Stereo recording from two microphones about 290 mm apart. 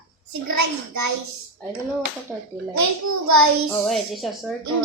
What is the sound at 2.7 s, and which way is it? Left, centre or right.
Speech, right.